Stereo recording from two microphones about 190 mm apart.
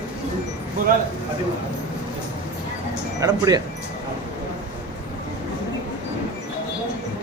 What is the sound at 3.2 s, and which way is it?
Speech, 20° right (ahead or behind).